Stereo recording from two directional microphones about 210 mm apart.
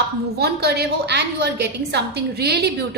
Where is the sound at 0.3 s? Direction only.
50° right (ahead or behind).